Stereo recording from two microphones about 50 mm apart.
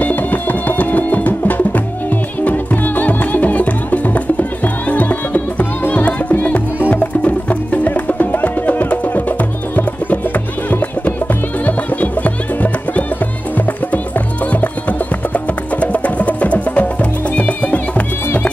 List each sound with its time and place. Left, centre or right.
0.0 s music: left